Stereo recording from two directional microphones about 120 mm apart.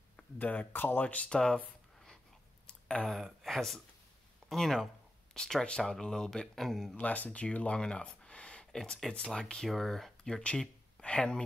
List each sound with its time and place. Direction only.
0.4 s speech: 15° left (ahead or behind)
2.6 s a sound: 10° left (ahead or behind)
3.2 s speech: centre (ahead or behind)
7.0 s speech: 10° left (ahead or behind)